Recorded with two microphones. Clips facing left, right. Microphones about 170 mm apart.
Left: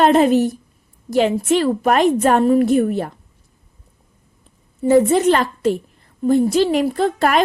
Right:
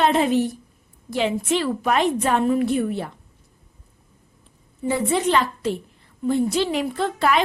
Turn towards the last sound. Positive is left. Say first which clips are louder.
# left 4 dB
turn(degrees=45)  # may be behind; listen again after turning